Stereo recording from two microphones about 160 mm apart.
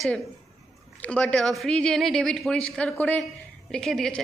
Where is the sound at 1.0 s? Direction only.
5° left (ahead or behind).